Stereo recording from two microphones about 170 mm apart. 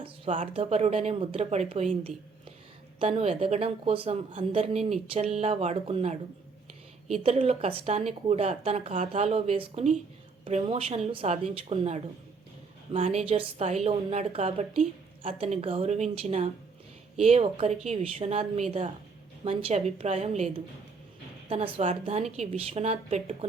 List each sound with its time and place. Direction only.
0.5 s speech: 35° right (ahead or behind)